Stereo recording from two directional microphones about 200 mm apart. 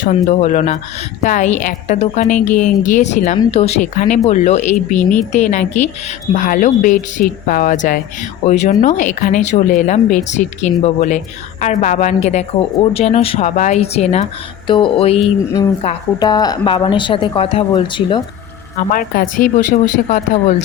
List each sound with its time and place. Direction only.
0.0 s a woman's voice: 35° left (ahead or behind)
16.2 s speech: 20° left (ahead or behind)
18.9 s a woman's voice: 45° left (ahead or behind)